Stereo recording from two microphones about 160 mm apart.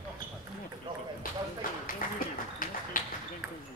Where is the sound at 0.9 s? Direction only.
30° right (ahead or behind).